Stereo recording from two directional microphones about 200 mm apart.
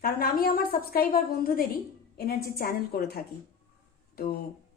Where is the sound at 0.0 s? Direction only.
50° left (ahead or behind).